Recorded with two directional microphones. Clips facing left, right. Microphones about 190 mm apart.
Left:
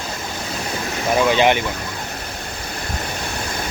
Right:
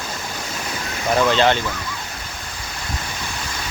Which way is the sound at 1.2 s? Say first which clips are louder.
Left 1 dB; 10° left (ahead or behind).